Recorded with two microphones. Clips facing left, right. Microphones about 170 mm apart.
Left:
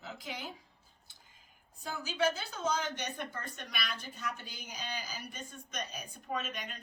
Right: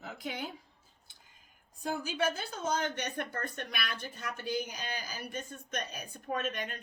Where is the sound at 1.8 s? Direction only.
55° right (ahead or behind).